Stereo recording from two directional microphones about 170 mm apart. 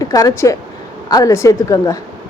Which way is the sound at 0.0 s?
20° left (ahead or behind).